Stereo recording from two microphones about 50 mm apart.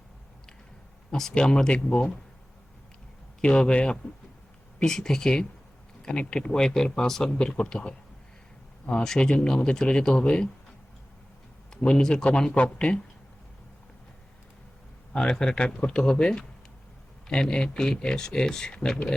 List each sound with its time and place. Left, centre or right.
1.3 s speech: centre
3.4 s speech: centre
11.7 s speech: centre
15.1 s speech: centre